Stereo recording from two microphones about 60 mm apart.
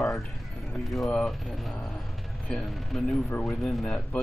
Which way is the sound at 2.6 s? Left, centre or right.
Centre.